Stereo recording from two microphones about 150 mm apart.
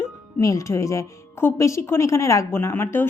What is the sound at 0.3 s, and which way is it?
Speech, 20° left (ahead or behind).